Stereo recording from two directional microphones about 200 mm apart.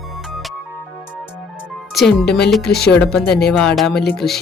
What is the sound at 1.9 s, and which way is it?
A woman's voice, centre (ahead or behind).